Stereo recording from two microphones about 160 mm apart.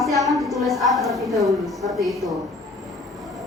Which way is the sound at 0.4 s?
Centre (ahead or behind).